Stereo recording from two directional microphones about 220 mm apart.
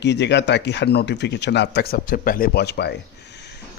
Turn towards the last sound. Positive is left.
turn(degrees=50)  # may be behind; listen again after turning